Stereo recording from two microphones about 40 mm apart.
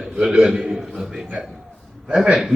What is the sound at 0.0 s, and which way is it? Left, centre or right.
Speech, right.